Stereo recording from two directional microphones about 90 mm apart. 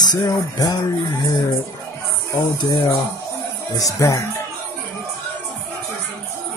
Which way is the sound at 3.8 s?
35° left (ahead or behind).